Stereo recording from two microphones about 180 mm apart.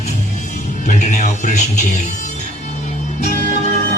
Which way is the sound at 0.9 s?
40° left (ahead or behind).